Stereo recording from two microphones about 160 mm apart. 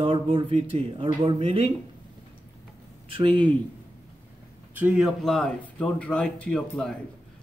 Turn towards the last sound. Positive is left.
turn(degrees=0)  # may be behind; listen again after turning